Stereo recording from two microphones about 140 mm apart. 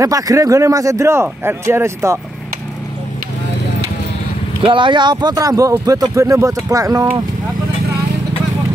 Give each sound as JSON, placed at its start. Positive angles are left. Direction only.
{"t": 0.0, "sound": "speech", "side_deg": -25}
{"t": 4.6, "sound": "speech", "side_deg": -35}